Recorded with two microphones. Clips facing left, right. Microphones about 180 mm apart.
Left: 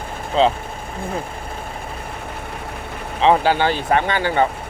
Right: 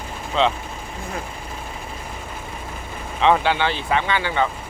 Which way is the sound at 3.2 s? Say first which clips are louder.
Left 3 dB; 35° left (ahead or behind).